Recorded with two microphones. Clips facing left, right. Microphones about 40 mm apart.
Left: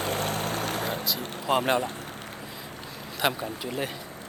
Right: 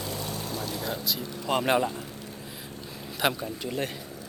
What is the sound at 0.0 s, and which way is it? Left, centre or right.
Vehicle, left.